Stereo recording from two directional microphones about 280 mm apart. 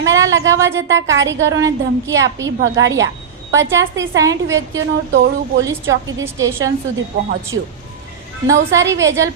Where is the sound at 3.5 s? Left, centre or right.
Centre.